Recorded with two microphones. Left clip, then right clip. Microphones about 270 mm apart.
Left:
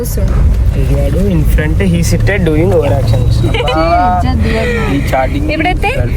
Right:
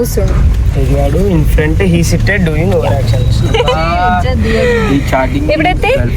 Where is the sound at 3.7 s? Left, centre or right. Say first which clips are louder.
Left 2 dB; left.